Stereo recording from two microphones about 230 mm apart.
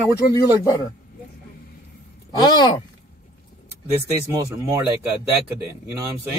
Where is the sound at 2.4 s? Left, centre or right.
Centre.